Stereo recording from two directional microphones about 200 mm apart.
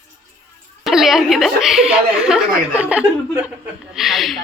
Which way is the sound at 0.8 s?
Centre (ahead or behind).